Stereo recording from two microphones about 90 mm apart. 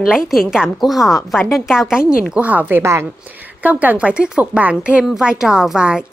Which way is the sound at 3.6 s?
15° right (ahead or behind).